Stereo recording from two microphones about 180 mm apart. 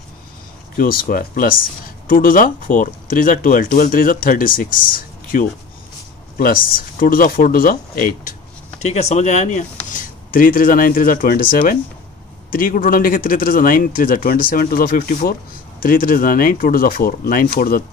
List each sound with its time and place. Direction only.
0.7 s speech: 55° left (ahead or behind)